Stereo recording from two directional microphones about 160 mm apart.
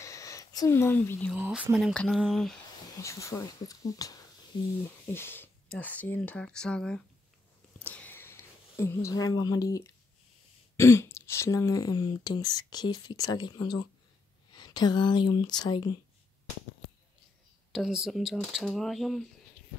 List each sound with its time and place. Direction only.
0.0 s a sound: 20° left (ahead or behind)
1.3 s speech: 10° right (ahead or behind)
3.0 s speech: 20° left (ahead or behind)
7.8 s a sound: 10° left (ahead or behind)
10.8 s speech: 15° left (ahead or behind)
17.7 s speech: 5° right (ahead or behind)